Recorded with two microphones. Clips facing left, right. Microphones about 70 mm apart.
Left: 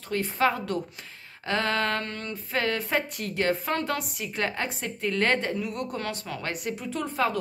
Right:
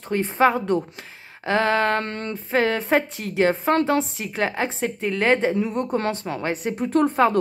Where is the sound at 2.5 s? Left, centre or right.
Right.